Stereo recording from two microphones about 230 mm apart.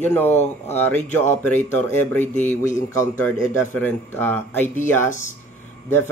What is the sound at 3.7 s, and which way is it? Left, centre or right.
Speech, centre.